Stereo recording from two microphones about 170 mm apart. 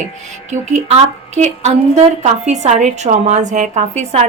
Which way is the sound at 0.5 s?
40° right (ahead or behind).